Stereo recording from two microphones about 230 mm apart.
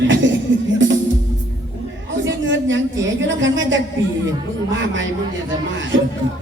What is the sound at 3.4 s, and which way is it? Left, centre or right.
Speech, right.